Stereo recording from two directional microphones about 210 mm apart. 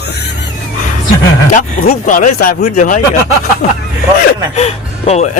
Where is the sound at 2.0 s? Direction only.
40° left (ahead or behind).